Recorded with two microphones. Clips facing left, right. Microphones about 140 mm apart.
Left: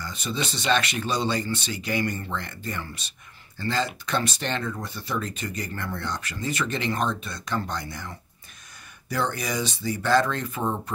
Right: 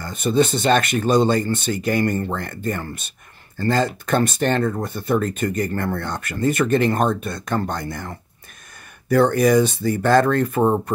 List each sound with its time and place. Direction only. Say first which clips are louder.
0.0 s speech: right 12 dB; 50° right (ahead or behind)